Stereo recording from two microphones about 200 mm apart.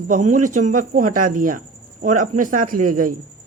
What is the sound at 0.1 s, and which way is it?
Speech, 40° right (ahead or behind).